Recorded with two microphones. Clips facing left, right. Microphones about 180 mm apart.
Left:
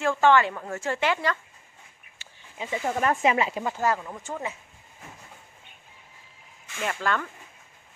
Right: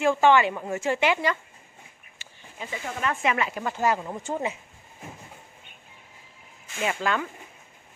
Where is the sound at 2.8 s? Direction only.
35° left (ahead or behind).